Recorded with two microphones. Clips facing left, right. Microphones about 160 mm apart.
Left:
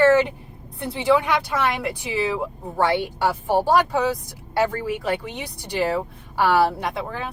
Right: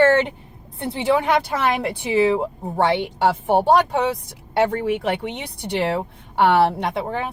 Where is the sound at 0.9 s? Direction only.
25° right (ahead or behind).